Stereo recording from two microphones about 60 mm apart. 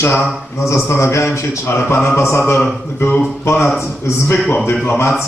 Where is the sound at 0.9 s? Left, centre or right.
Left.